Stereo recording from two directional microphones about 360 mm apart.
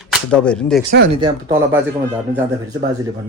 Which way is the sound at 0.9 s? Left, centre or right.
Right.